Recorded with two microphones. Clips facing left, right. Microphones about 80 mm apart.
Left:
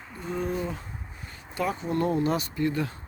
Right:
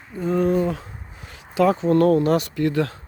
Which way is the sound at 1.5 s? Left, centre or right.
Right.